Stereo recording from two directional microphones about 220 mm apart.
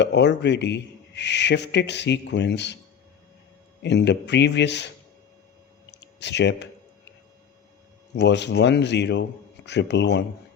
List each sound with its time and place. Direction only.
0.0 s speech: 50° left (ahead or behind)
3.8 s speech: 50° left (ahead or behind)
5.9 s a sound: 50° left (ahead or behind)
8.1 s speech: 50° left (ahead or behind)